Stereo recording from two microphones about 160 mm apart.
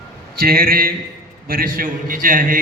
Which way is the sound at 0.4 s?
65° right (ahead or behind).